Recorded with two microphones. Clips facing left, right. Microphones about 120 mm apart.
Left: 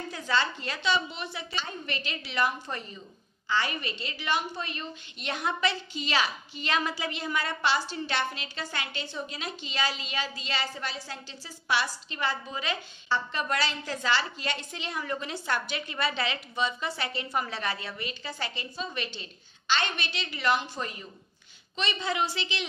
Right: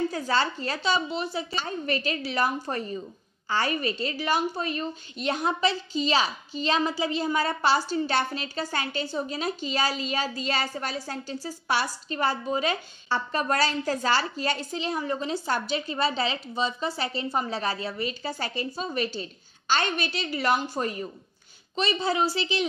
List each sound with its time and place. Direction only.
0.1 s a woman's voice: 40° right (ahead or behind)